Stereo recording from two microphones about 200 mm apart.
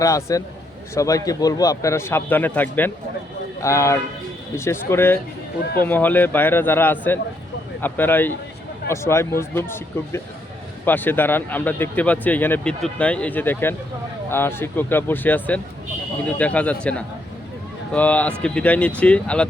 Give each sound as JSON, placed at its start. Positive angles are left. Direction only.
{"t": 0.0, "sound": "speech", "side_deg": 15}